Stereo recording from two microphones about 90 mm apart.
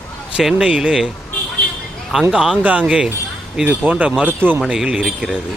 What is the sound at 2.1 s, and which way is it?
Speech, 5° right (ahead or behind).